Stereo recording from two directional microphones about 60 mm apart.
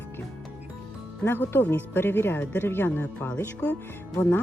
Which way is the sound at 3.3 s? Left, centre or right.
Left.